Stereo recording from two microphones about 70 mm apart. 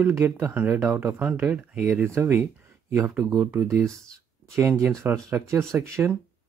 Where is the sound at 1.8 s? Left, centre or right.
Right.